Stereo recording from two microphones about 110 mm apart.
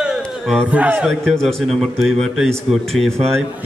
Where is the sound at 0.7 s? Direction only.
10° right (ahead or behind).